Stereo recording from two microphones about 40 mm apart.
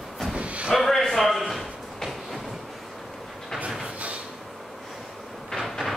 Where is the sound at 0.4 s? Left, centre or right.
Right.